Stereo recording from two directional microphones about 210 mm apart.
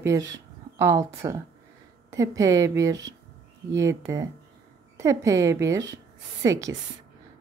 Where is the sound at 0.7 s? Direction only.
15° right (ahead or behind).